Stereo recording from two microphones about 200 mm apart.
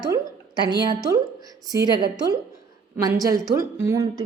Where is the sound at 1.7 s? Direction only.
20° right (ahead or behind).